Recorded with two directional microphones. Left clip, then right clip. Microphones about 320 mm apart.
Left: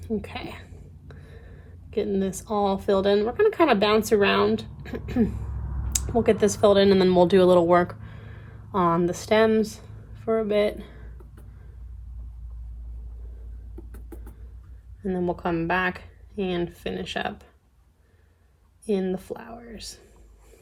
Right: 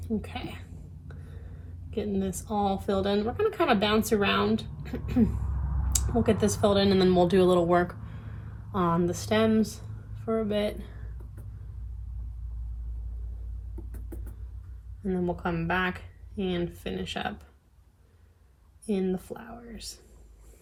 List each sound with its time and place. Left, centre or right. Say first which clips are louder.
0.2 s a woman's voice: left 3 dB; left
2.0 s a woman's voice: left 6 dB; left
6.4 s a woman's voice: left 8 dB; left
15.0 s a woman's voice: left 4 dB; left
18.9 s a woman's voice: left 4 dB; left